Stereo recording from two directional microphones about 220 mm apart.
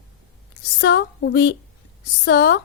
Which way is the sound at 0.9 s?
50° left (ahead or behind).